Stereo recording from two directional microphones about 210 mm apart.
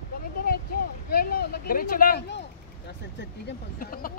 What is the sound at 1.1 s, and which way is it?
Speech, 50° left (ahead or behind).